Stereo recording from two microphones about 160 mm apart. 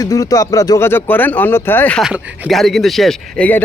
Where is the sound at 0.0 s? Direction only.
20° left (ahead or behind).